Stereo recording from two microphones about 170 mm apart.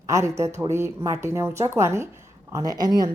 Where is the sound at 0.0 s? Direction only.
20° right (ahead or behind).